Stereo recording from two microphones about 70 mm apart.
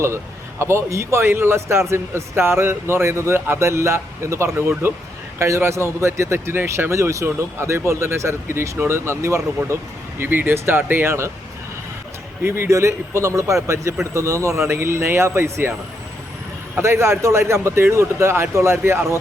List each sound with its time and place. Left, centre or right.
0.6 s speech: right
10.2 s speech: right
12.4 s speech: right
16.8 s speech: right